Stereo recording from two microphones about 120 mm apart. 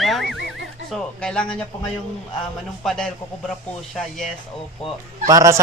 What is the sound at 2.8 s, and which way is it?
Speech, 5° left (ahead or behind).